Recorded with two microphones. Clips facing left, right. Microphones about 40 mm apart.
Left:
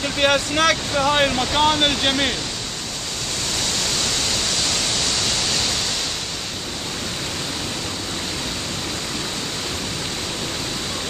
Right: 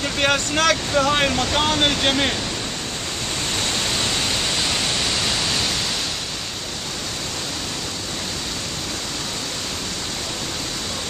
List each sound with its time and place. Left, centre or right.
0.0 s speech: centre
3.8 s pink noise: right